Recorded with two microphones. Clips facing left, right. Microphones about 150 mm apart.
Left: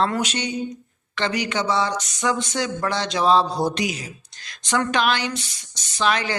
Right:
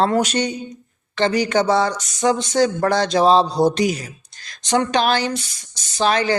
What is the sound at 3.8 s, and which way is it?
Speech, 40° right (ahead or behind).